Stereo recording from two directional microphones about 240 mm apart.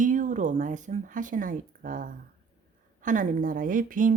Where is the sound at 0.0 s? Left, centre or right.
Right.